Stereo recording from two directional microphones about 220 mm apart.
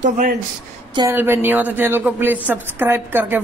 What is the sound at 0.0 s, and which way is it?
Speech, 35° right (ahead or behind).